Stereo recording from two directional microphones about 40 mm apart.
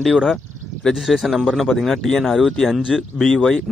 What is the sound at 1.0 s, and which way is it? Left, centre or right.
Speech, centre.